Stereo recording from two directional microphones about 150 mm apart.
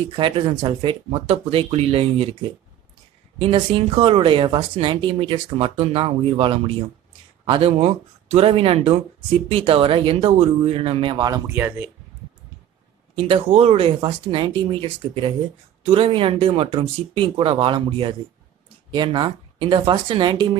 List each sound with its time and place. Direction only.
0.1 s a woman's voice: 35° right (ahead or behind)
3.3 s a woman's voice: 35° right (ahead or behind); by 11.9 s 15° right (ahead or behind)
13.1 s a woman's voice: 35° right (ahead or behind)